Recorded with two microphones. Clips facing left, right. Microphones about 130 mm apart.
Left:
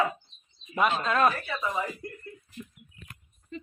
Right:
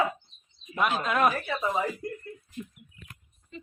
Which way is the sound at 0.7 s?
Centre (ahead or behind).